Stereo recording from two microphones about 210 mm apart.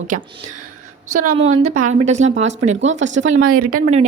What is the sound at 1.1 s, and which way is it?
A woman's voice, 35° right (ahead or behind).